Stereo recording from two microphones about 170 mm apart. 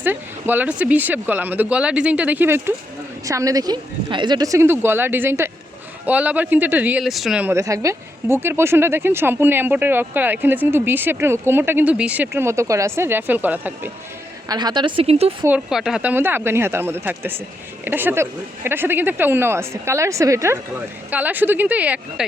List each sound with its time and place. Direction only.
0.0 s speech: 10° right (ahead or behind)
14.4 s speech: 25° right (ahead or behind)
15.4 s speech: 5° right (ahead or behind)